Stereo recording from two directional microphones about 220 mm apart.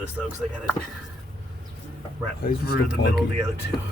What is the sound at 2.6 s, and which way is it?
Speech, 45° left (ahead or behind).